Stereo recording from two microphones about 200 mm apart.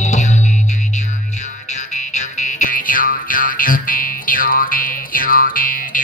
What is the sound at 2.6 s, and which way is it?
Music, 45° left (ahead or behind).